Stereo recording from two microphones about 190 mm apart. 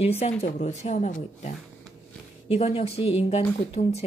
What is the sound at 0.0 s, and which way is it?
Speech, 35° left (ahead or behind).